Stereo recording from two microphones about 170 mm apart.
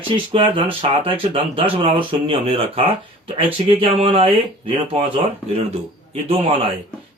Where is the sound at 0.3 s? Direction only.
30° right (ahead or behind).